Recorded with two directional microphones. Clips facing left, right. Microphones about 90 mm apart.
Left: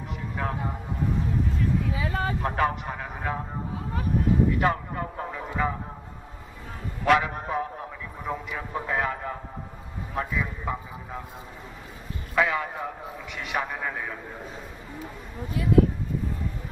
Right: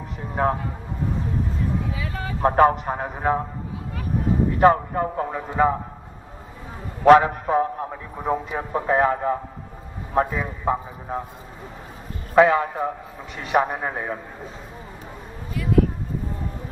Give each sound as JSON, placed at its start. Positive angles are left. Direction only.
{"t": 0.4, "sound": "a man's voice", "side_deg": -35}
{"t": 2.0, "sound": "vehicle", "side_deg": 30}
{"t": 2.4, "sound": "a man's voice", "side_deg": -35}
{"t": 4.5, "sound": "a man's voice", "side_deg": -35}
{"t": 7.1, "sound": "a man's voice", "side_deg": -35}
{"t": 12.4, "sound": "a man's voice", "side_deg": -35}